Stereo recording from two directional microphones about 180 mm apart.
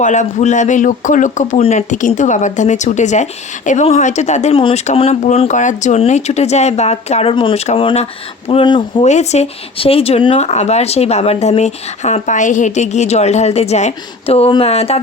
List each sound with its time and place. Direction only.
0.0 s a man's voice: 40° left (ahead or behind)